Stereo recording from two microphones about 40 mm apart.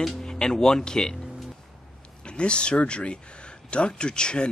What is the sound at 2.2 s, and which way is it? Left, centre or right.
Speech, left.